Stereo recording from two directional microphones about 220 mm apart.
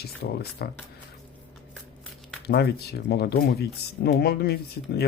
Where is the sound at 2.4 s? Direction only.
50° left (ahead or behind).